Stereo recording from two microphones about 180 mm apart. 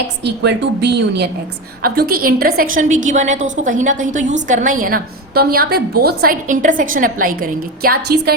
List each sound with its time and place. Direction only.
0.3 s speech: 70° right (ahead or behind)
1.8 s a woman's voice: 55° right (ahead or behind)